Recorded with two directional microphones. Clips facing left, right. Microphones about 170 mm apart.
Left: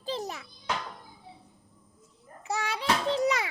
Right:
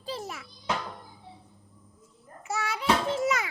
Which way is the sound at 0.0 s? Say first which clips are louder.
Left 2 dB; 20° left (ahead or behind).